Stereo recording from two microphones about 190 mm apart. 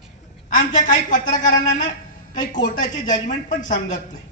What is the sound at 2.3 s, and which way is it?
A man's voice, 40° left (ahead or behind).